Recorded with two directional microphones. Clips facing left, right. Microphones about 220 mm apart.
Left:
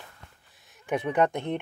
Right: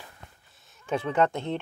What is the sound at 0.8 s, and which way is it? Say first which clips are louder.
Speech: even; 15° left (ahead or behind).